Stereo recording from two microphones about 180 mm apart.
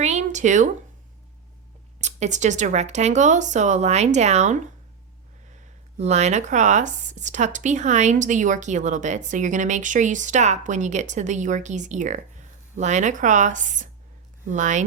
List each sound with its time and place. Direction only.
0.0 s a sound: 40° right (ahead or behind)
2.0 s speech: 40° right (ahead or behind)
6.0 s speech: 40° right (ahead or behind)